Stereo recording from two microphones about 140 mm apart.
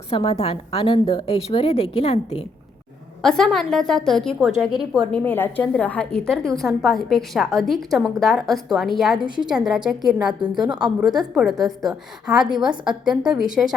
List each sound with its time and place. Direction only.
0.1 s a woman's voice: 40° left (ahead or behind)
3.2 s a woman's voice: 5° left (ahead or behind)
5.2 s a woman's voice: 15° left (ahead or behind)
9.2 s a woman's voice: 35° right (ahead or behind)
9.5 s a woman's voice: 5° right (ahead or behind)